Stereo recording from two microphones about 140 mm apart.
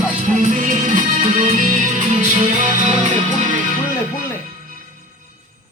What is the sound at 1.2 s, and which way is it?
Music, 50° right (ahead or behind).